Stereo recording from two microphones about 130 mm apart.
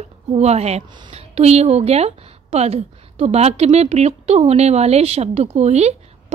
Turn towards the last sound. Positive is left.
turn(degrees=-55)  # may be behind; listen again after turning